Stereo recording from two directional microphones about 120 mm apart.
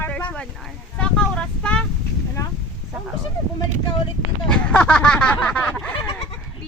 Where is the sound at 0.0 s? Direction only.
10° left (ahead or behind).